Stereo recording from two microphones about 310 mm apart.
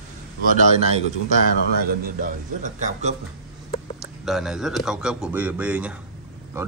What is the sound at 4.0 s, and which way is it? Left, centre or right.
Speech, centre.